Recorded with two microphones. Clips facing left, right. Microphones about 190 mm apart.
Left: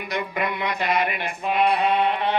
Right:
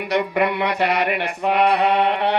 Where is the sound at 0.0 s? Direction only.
70° right (ahead or behind).